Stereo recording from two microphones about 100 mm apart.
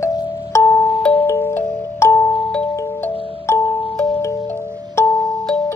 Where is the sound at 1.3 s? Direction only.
25° left (ahead or behind).